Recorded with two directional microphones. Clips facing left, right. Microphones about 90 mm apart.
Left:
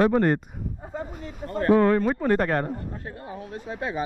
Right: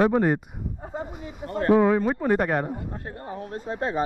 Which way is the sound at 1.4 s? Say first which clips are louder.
Even; 30° right (ahead or behind).